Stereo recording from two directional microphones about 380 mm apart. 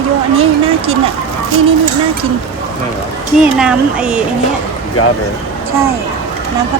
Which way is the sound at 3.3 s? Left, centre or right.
Centre.